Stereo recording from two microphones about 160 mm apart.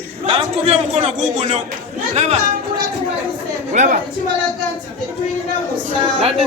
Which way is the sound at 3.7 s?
45° right (ahead or behind).